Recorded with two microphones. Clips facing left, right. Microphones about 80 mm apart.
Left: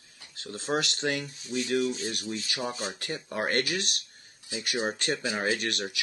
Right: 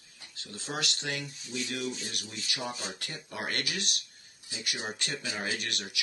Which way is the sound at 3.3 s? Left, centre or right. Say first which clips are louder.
Left 7 dB; left.